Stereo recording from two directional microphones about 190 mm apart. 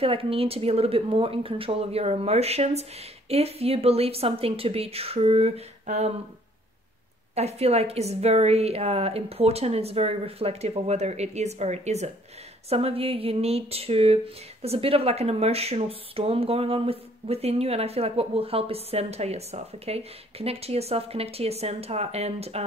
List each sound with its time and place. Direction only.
0.0 s speech: 30° right (ahead or behind)
7.3 s speech: 35° right (ahead or behind)